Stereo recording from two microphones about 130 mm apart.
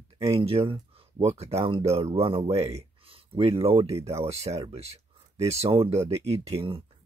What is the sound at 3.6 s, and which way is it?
Speech, 50° right (ahead or behind).